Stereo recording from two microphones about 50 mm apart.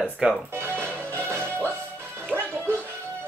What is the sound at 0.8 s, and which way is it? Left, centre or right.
Music, right.